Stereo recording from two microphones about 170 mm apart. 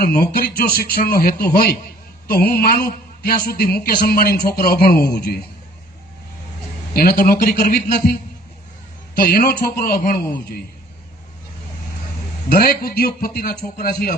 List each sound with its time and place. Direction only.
0.0 s speech: 60° left (ahead or behind)
6.9 s speech: 55° left (ahead or behind)
9.2 s speech: 60° left (ahead or behind)
12.5 s speech: 60° left (ahead or behind)